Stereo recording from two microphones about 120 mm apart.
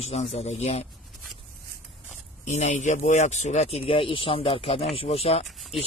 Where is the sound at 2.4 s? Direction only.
75° left (ahead or behind).